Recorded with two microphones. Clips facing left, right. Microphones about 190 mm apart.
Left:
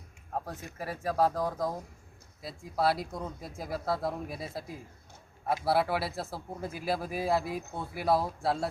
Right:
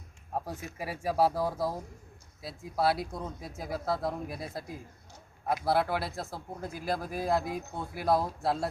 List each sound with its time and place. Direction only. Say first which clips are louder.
0.3 s speech: right 1 dB; 10° right (ahead or behind)